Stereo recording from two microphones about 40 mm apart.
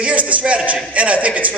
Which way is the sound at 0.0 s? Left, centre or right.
Right.